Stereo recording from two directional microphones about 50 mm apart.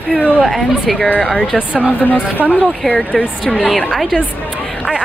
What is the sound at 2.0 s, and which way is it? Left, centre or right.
Speech, left.